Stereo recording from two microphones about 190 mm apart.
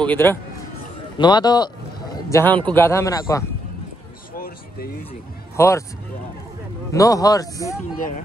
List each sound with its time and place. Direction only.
0.0 s speech: 10° left (ahead or behind)
1.1 s a man's voice: 25° left (ahead or behind)
4.4 s a sound: 50° left (ahead or behind)
5.6 s speech: 15° left (ahead or behind)
6.9 s speech: 15° left (ahead or behind)